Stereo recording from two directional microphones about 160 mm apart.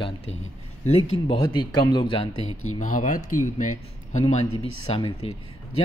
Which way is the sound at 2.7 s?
55° left (ahead or behind).